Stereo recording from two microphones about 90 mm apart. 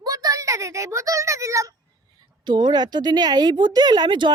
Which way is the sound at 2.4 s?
55° right (ahead or behind).